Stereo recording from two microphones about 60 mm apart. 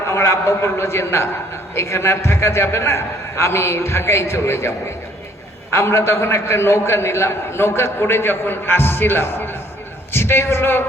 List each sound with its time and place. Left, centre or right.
0.1 s a man's voice: left
5.7 s a man's voice: left